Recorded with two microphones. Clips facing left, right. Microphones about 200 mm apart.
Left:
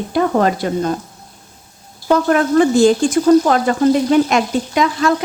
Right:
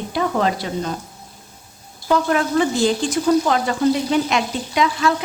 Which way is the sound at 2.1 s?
50° left (ahead or behind).